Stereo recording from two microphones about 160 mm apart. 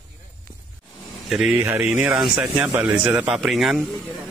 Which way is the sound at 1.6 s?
15° right (ahead or behind).